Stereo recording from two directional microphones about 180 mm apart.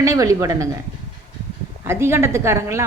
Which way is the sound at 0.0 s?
15° right (ahead or behind).